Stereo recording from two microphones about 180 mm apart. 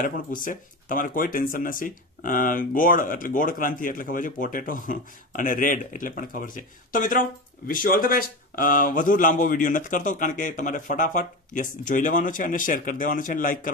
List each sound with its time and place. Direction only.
0.0 s speech: 50° left (ahead or behind)